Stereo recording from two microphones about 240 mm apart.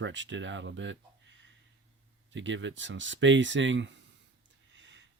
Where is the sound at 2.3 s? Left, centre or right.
Right.